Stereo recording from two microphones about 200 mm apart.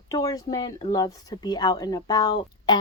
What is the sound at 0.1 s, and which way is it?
Speech, 15° left (ahead or behind).